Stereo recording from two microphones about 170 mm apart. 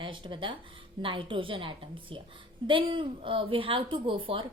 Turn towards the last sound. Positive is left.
turn(degrees=-30)  # may be behind; listen again after turning